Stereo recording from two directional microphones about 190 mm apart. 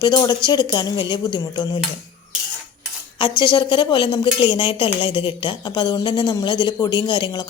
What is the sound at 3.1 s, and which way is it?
Speech, 25° left (ahead or behind).